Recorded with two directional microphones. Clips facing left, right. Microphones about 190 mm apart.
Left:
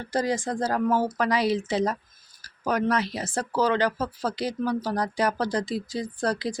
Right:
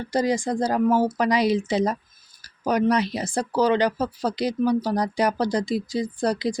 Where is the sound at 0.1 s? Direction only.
15° right (ahead or behind).